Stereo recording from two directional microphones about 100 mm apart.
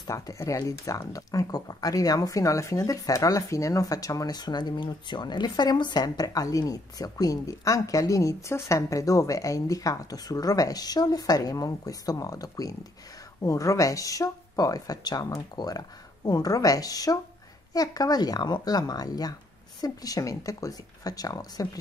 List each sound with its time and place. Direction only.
0.0 s speech: 35° left (ahead or behind)